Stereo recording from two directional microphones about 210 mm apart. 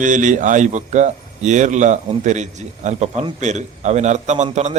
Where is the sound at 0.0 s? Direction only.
35° right (ahead or behind).